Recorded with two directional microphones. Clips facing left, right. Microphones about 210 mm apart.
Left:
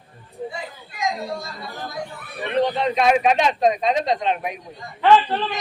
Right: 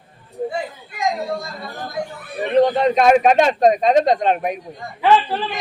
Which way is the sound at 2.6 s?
45° right (ahead or behind).